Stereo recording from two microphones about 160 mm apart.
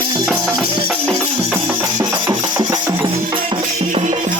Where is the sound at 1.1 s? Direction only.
20° right (ahead or behind).